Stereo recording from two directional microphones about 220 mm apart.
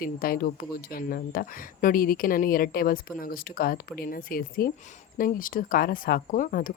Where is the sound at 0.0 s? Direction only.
40° left (ahead or behind).